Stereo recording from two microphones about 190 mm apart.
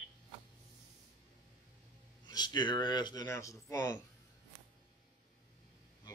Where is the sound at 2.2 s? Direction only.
20° left (ahead or behind).